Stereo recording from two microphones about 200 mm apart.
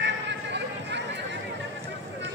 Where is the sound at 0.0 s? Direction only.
60° right (ahead or behind).